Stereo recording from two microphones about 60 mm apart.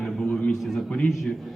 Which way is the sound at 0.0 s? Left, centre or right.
Centre.